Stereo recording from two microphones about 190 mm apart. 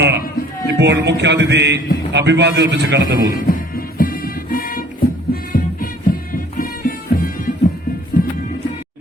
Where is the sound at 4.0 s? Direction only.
50° left (ahead or behind).